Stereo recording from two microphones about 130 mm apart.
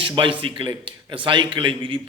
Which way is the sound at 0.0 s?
40° right (ahead or behind).